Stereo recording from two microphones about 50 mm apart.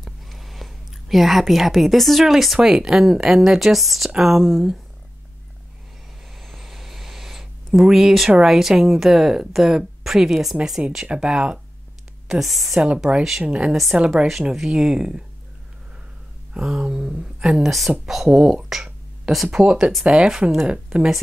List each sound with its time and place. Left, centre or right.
0.0 s a sound: centre
2.6 s speech: centre
6.4 s a sound: centre
7.8 s speech: centre
11.1 s speech: centre
12.3 s speech: centre
13.1 s speech: right
14.5 s speech: centre
16.5 s speech: centre
17.6 s speech: centre; by 20.8 s right
20.9 s speech: centre